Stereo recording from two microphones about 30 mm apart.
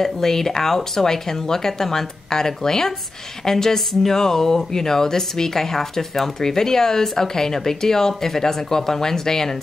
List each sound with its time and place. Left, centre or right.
0.0 s speech: centre